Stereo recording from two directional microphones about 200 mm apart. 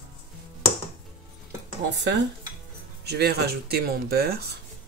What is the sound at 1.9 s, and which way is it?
Speech, 60° right (ahead or behind).